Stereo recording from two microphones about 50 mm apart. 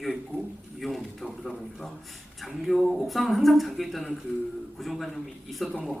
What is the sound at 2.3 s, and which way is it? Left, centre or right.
A man's voice, centre.